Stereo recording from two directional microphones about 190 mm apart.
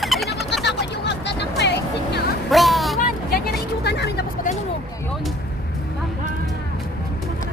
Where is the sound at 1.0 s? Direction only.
65° left (ahead or behind).